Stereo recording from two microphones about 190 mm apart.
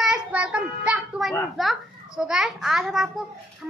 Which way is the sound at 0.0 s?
5° right (ahead or behind).